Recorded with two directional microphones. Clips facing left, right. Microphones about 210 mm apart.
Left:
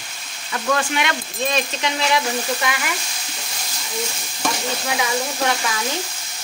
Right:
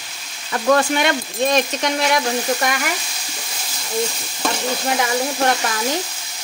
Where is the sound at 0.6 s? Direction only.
40° right (ahead or behind).